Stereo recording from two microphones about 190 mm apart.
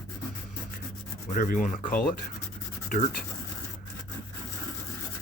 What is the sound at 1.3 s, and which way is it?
Speech, 45° left (ahead or behind).